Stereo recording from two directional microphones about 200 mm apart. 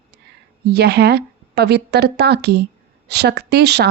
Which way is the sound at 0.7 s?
55° right (ahead or behind).